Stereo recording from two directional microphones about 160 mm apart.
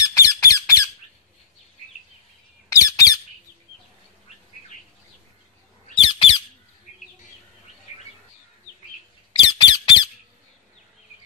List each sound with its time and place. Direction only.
0.0 s squawk: 20° left (ahead or behind)
2.7 s squawk: 20° left (ahead or behind)
5.9 s squawk: 35° left (ahead or behind)
9.4 s squeak: 30° left (ahead or behind)